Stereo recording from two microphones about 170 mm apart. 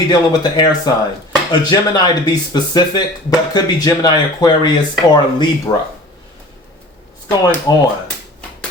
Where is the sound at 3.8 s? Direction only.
25° left (ahead or behind).